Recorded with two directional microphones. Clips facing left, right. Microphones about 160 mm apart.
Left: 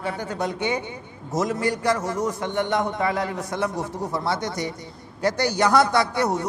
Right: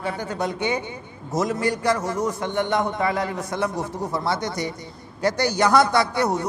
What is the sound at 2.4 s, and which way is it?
A man's voice, 10° right (ahead or behind).